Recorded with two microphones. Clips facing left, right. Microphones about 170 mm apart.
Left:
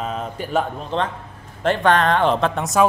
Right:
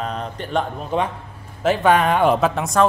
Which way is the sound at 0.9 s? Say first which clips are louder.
Right 2 dB; 10° right (ahead or behind).